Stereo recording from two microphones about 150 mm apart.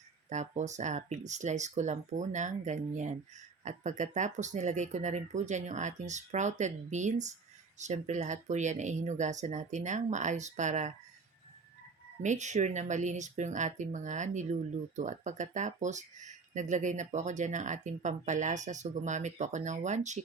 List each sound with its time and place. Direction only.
0.3 s speech: 50° right (ahead or behind)
12.2 s speech: 55° right (ahead or behind)